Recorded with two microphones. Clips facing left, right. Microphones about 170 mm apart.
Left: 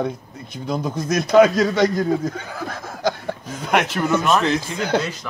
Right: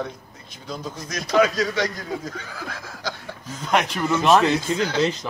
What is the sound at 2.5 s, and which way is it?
Chuckle, 50° left (ahead or behind).